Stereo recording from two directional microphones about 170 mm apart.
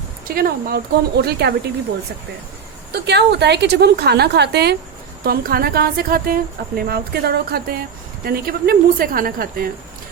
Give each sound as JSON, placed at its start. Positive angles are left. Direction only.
{"t": 0.3, "sound": "a woman's voice", "side_deg": -60}
{"t": 2.9, "sound": "a woman's voice", "side_deg": -80}
{"t": 5.2, "sound": "speech", "side_deg": -65}